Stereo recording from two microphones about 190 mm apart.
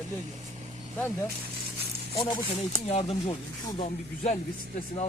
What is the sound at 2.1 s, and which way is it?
Speech, 20° left (ahead or behind).